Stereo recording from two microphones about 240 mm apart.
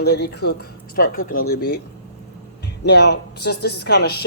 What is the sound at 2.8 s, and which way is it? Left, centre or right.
Speech, left.